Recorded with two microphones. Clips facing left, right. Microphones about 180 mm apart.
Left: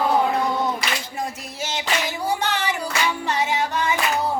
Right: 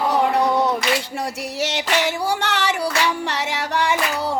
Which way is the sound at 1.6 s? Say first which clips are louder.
Right 4 dB; 75° right (ahead or behind).